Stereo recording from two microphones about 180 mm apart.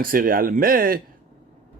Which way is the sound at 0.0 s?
50° right (ahead or behind).